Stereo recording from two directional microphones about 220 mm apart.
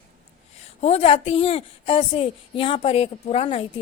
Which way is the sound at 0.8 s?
25° left (ahead or behind).